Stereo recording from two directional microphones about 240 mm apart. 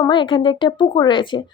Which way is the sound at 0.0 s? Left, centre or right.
Centre.